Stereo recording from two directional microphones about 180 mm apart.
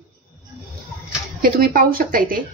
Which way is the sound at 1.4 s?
55° right (ahead or behind).